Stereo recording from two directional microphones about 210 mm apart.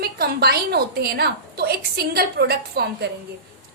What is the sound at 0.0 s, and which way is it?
A woman's voice, 50° right (ahead or behind).